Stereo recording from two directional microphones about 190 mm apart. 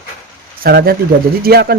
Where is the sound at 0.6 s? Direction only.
55° right (ahead or behind).